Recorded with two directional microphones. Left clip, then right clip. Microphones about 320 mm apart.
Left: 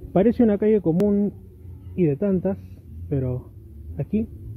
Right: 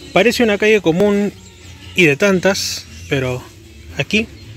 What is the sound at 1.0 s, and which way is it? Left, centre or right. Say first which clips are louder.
A man's voice: right 7 dB; centre.